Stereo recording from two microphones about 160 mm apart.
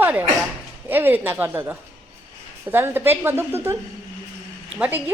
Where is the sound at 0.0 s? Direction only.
10° right (ahead or behind).